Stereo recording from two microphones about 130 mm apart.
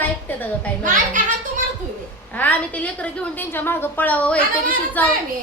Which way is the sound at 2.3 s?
10° left (ahead or behind).